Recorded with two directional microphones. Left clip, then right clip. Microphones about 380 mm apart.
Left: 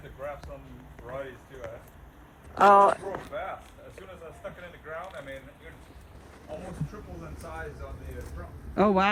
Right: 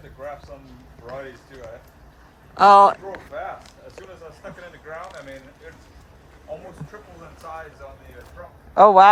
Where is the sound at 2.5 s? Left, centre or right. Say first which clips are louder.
Right 7 dB; centre.